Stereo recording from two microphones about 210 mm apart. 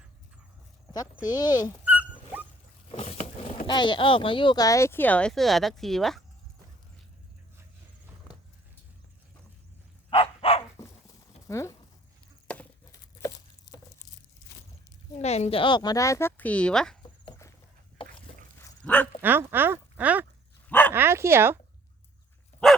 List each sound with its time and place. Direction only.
0.9 s speech: 20° left (ahead or behind)
1.8 s dog: 5° right (ahead or behind)
2.9 s a sound: 30° left (ahead or behind)
3.7 s speech: 20° left (ahead or behind); by 6.2 s centre (ahead or behind)
10.1 s dog: 25° left (ahead or behind)
10.8 s dog: 15° left (ahead or behind)
11.4 s speech: 15° left (ahead or behind)
15.2 s speech: 30° left (ahead or behind); by 17.0 s 5° left (ahead or behind)
17.0 s a sound: 20° left (ahead or behind)
18.3 s dog: 25° left (ahead or behind)
18.8 s dog: 5° left (ahead or behind)
19.2 s speech: 10° right (ahead or behind)
20.7 s dog: 5° left (ahead or behind)
20.9 s speech: 10° right (ahead or behind)